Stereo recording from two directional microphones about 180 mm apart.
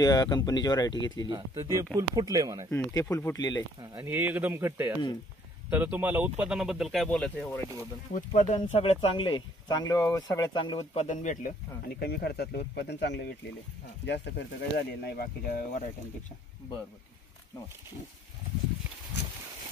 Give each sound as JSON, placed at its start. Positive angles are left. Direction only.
{"t": 0.0, "sound": "speech", "side_deg": 20}
{"t": 1.3, "sound": "speech", "side_deg": -15}
{"t": 2.7, "sound": "speech", "side_deg": 15}
{"t": 3.9, "sound": "speech", "side_deg": -10}
{"t": 8.1, "sound": "speech", "side_deg": 40}
{"t": 12.0, "sound": "speech", "side_deg": 60}